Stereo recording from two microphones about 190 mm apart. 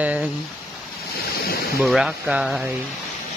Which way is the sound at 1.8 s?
Centre (ahead or behind).